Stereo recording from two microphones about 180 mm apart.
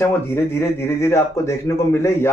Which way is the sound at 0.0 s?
15° left (ahead or behind).